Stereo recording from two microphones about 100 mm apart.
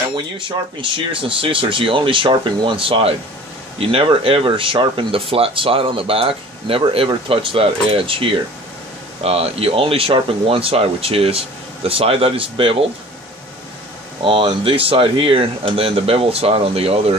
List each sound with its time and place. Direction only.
0.1 s speech: 55° right (ahead or behind)
9.2 s speech: 85° right; by 12.7 s 65° right (ahead or behind)
14.2 s speech: 60° right (ahead or behind); by 17.2 s 80° right